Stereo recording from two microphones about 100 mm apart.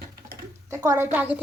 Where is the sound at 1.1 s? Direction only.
15° right (ahead or behind).